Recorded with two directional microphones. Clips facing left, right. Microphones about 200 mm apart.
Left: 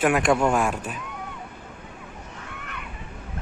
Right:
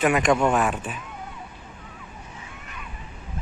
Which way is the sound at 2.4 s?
65° left (ahead or behind).